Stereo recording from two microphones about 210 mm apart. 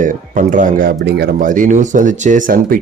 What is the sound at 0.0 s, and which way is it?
Speech, 40° right (ahead or behind).